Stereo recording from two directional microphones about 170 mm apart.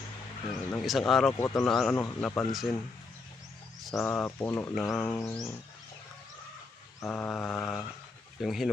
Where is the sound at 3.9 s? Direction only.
5° left (ahead or behind).